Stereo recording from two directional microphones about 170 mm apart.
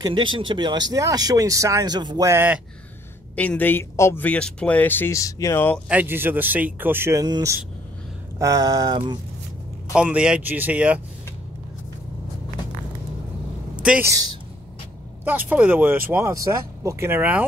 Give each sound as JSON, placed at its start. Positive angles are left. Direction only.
{"t": 0.0, "sound": "speech", "side_deg": -30}
{"t": 3.3, "sound": "speech", "side_deg": 10}
{"t": 5.9, "sound": "speech", "side_deg": -10}
{"t": 9.9, "sound": "speech", "side_deg": -5}
{"t": 13.8, "sound": "speech", "side_deg": -10}
{"t": 15.2, "sound": "speech", "side_deg": -10}